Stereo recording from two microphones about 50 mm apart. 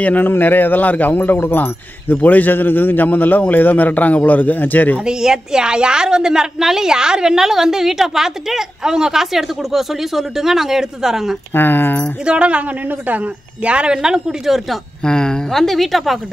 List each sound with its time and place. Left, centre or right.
0.0 s a man's voice: left
5.0 s a woman's voice: centre
11.5 s a man's voice: left
12.3 s speech: right
13.7 s a woman's voice: right
15.0 s speech: centre
15.6 s a woman's voice: centre